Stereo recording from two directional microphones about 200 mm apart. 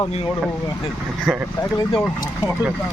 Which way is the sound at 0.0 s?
30° left (ahead or behind).